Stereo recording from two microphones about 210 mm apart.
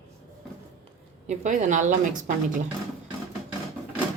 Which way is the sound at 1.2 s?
35° right (ahead or behind).